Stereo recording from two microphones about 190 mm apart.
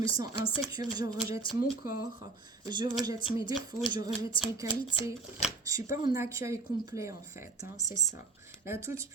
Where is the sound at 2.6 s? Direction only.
25° right (ahead or behind).